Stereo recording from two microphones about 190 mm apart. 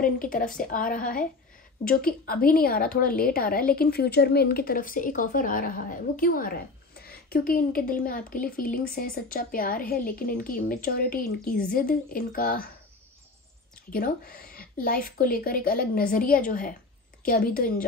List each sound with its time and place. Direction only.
0.0 s a woman's voice: 45° left (ahead or behind)
13.9 s a woman's voice: 50° left (ahead or behind)